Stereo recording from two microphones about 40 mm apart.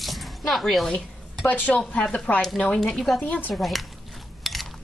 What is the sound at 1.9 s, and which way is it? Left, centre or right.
Speech, left.